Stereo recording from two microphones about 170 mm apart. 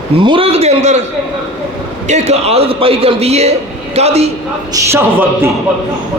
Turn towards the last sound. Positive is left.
turn(degrees=-15)  # may be behind; listen again after turning